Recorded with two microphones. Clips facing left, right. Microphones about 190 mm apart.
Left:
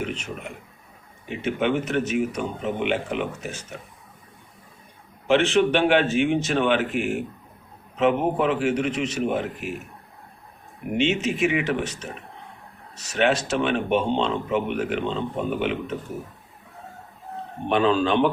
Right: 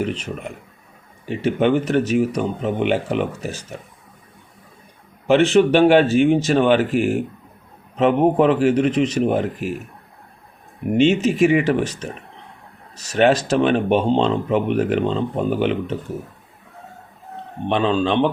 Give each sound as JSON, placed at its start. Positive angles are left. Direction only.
{"t": 0.0, "sound": "speech", "side_deg": -35}
{"t": 1.3, "sound": "speech", "side_deg": -35}
{"t": 5.3, "sound": "speech", "side_deg": -40}
{"t": 11.2, "sound": "speech", "side_deg": -35}
{"t": 13.1, "sound": "speech", "side_deg": -35}
{"t": 17.7, "sound": "speech", "side_deg": -25}